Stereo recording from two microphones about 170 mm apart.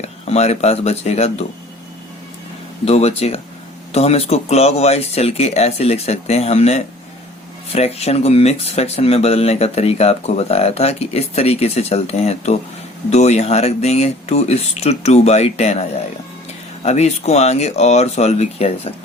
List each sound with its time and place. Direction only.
0.0 s speech: 40° left (ahead or behind)
2.8 s speech: 35° left (ahead or behind)